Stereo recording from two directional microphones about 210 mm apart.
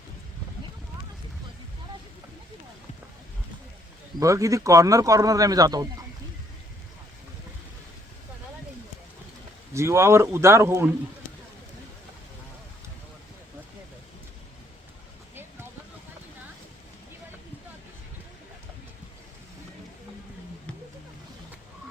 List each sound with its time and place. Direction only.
4.2 s speech: 15° right (ahead or behind)
9.7 s speech: 15° right (ahead or behind)